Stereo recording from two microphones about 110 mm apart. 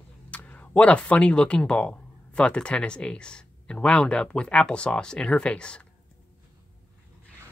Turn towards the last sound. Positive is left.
turn(degrees=10)  # may be behind; listen again after turning